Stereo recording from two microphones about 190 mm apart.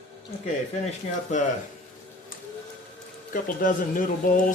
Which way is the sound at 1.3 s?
40° left (ahead or behind).